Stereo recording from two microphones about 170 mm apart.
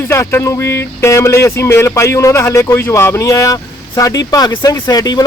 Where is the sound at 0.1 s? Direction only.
15° left (ahead or behind).